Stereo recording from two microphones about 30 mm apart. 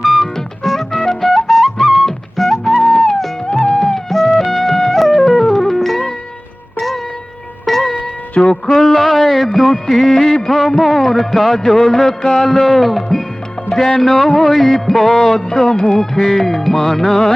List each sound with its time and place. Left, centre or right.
0.0 s music: centre
0.3 s music: centre
1.8 s music: centre
2.0 s music: centre
8.4 s music: left
8.8 s music: centre
15.4 s music: centre